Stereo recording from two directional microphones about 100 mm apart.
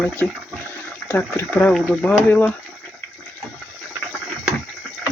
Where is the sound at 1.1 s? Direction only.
20° left (ahead or behind).